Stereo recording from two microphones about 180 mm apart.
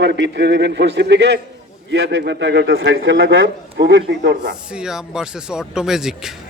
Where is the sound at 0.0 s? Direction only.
75° right (ahead or behind).